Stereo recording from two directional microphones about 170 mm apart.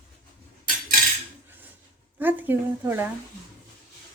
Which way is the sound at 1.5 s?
10° right (ahead or behind).